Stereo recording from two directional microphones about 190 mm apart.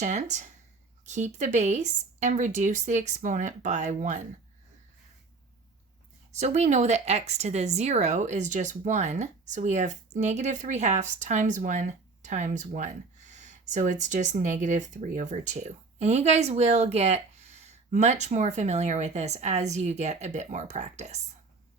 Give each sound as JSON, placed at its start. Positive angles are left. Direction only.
{"t": 0.0, "sound": "speech", "side_deg": -40}
{"t": 6.4, "sound": "speech", "side_deg": -35}